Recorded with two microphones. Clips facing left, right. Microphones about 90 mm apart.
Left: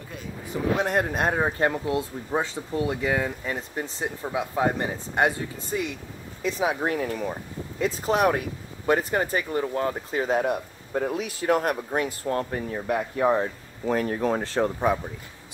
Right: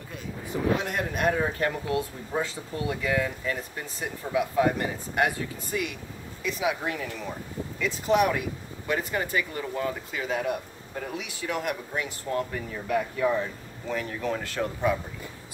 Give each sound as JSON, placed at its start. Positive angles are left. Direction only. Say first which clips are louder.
{"t": 0.8, "sound": "speech", "louder": "left 3 dB", "side_deg": 35}